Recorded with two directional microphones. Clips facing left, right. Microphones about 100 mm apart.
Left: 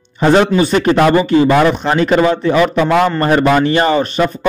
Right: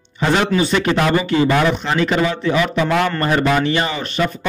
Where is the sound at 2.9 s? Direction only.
25° left (ahead or behind).